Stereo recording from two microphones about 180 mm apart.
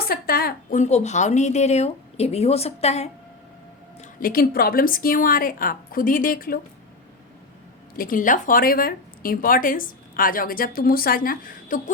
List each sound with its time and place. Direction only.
0.0 s a woman's voice: 55° left (ahead or behind); by 3.1 s 35° left (ahead or behind)
4.2 s speech: 55° left (ahead or behind)
7.9 s speech: 50° left (ahead or behind)